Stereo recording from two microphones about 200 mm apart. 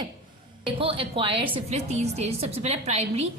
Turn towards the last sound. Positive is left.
turn(degrees=-30)  # may be behind; listen again after turning